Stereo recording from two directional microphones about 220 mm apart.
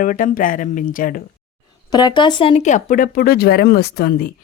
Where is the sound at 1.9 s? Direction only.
20° left (ahead or behind).